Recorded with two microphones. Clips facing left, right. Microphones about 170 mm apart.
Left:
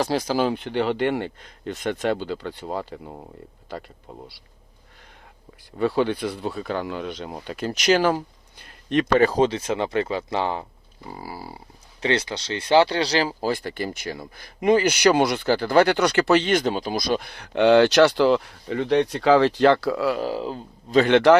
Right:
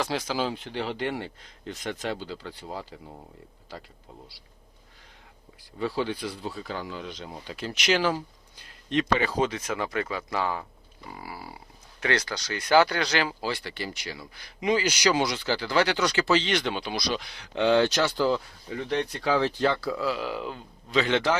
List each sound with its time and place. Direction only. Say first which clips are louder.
0.0 s speech: left 6 dB; 40° left (ahead or behind)
0.4 s speech: left 8 dB; 65° left (ahead or behind)
5.7 s speech: left 7 dB; 60° left (ahead or behind); by 9.4 s 45° left (ahead or behind)
9.4 s speech: left 6 dB; 30° left (ahead or behind)
13.5 s speech: left 7 dB; 50° left (ahead or behind); by 20.1 s 70° left (ahead or behind)
20.1 s speech: left 6 dB; 35° left (ahead or behind)
21.0 s speech: left 10 dB; 65° left (ahead or behind)